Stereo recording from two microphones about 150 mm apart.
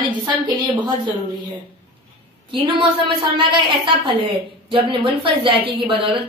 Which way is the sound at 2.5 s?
35° right (ahead or behind).